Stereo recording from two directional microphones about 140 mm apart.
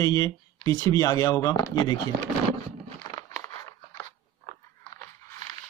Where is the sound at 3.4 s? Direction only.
25° left (ahead or behind).